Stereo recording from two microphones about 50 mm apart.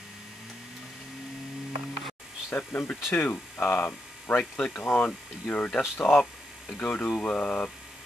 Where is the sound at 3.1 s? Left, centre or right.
Left.